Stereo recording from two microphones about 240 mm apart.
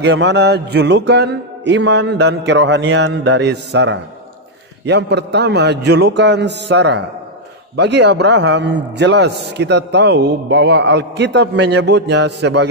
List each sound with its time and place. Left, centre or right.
0.0 s a man's voice: right